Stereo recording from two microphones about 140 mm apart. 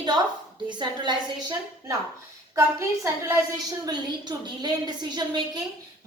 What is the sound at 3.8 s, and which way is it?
A woman's voice, 30° right (ahead or behind).